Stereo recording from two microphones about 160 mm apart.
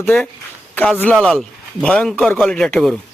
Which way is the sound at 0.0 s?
10° left (ahead or behind).